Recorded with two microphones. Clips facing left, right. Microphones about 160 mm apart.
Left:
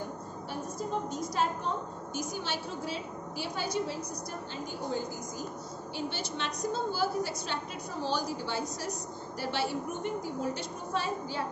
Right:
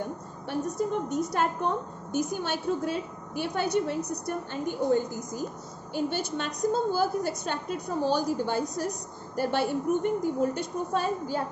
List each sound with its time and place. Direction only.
0.5 s a woman's voice: 65° right (ahead or behind); by 11.4 s 45° right (ahead or behind)